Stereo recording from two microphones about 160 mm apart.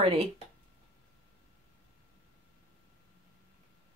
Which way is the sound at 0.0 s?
40° right (ahead or behind).